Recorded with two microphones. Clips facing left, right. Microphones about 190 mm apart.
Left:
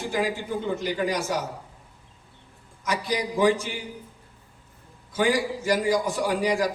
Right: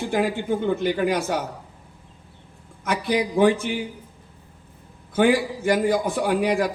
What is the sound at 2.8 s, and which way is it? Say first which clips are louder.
Speech: right 4 dB; 60° right (ahead or behind).